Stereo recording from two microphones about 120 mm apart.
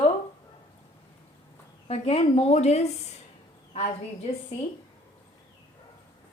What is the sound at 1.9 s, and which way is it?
A woman's voice, 55° left (ahead or behind).